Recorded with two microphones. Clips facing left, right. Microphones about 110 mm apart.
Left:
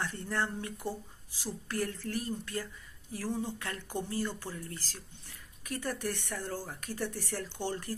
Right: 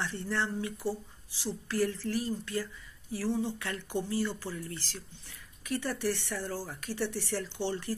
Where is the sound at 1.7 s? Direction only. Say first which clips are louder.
Right 4 dB; 50° left (ahead or behind).